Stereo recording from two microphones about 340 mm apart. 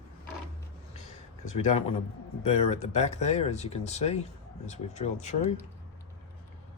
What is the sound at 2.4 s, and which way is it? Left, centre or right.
Speech, centre.